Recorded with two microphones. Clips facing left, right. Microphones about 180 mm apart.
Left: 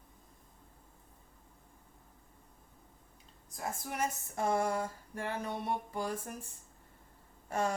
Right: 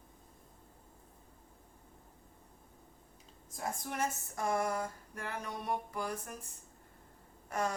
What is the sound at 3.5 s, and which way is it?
Speech, centre (ahead or behind).